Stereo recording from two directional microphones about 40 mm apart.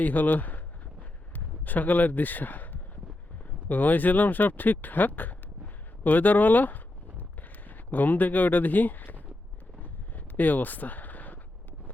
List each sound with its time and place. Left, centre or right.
0.0 s speech: left
3.7 s speech: left
9.8 s a sound: left